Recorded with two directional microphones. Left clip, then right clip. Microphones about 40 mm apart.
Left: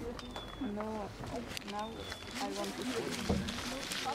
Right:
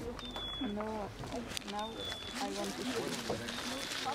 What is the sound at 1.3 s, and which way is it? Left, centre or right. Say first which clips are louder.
Speech: right 1 dB; right.